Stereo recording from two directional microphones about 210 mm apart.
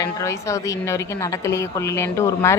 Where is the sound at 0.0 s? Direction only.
15° left (ahead or behind).